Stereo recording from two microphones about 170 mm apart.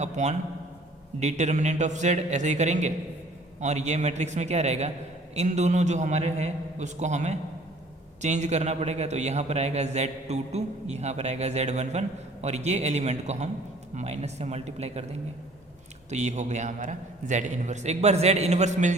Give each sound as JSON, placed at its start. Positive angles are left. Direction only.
{"t": 0.0, "sound": "a man's voice", "side_deg": -40}
{"t": 16.0, "sound": "a man's voice", "side_deg": -40}